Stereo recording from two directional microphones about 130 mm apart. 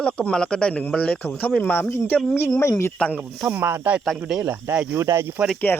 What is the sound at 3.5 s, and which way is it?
Speech, 15° right (ahead or behind).